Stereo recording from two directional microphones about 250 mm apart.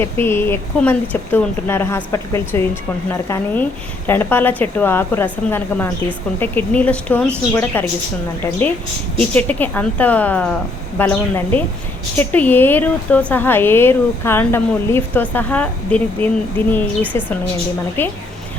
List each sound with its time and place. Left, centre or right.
0.0 s a woman's voice: centre
9.3 s a woman's voice: centre